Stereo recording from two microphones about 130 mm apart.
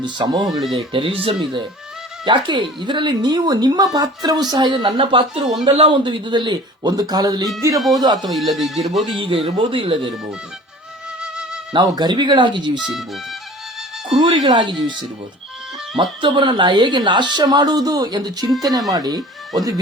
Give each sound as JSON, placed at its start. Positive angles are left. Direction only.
{"t": 0.0, "sound": "speech", "side_deg": -35}
{"t": 0.9, "sound": "speech", "side_deg": -45}
{"t": 4.9, "sound": "speech", "side_deg": -45}
{"t": 7.8, "sound": "speech", "side_deg": 0}
{"t": 9.1, "sound": "speech", "side_deg": -40}
{"t": 11.2, "sound": "music", "side_deg": -5}
{"t": 11.7, "sound": "speech", "side_deg": -35}
{"t": 14.1, "sound": "speech", "side_deg": -35}
{"t": 16.0, "sound": "speech", "side_deg": -40}